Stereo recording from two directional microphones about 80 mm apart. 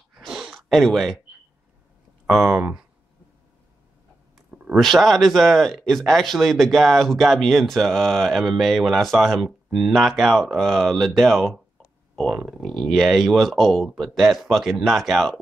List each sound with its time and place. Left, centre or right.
0.3 s a sound: centre
0.6 s speech: centre
2.2 s speech: centre
4.5 s a sound: centre
4.7 s speech: centre
12.3 s speech: centre